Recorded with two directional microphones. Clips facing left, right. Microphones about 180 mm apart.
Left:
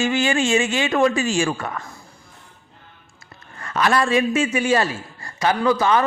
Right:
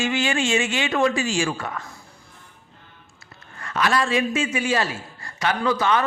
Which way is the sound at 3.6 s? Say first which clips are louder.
Left 3 dB; 40° left (ahead or behind).